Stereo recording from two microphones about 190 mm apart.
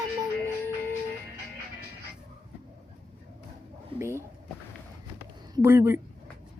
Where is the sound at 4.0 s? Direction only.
15° right (ahead or behind).